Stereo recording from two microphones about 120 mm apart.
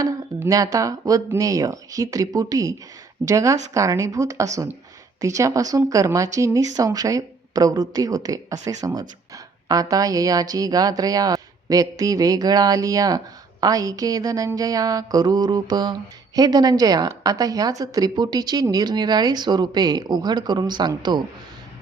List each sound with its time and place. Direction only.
0.3 s speech: 25° right (ahead or behind)